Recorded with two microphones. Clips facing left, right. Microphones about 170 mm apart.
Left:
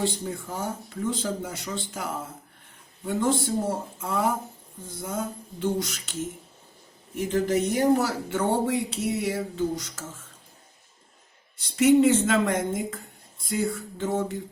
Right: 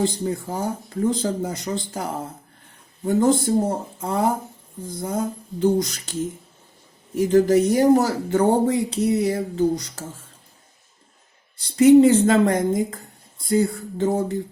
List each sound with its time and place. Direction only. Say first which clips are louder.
0.0 s speech: right 6 dB; 35° right (ahead or behind)
7.2 s speech: right 8 dB; 40° right (ahead or behind)
11.5 s speech: right 7 dB; 35° right (ahead or behind)